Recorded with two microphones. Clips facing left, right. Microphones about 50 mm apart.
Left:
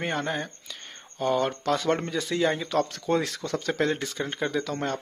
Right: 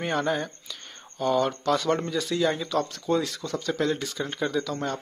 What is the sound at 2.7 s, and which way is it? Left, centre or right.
Speech, left.